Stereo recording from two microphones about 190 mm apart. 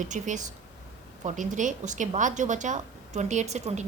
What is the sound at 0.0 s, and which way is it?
A woman's voice, 40° right (ahead or behind).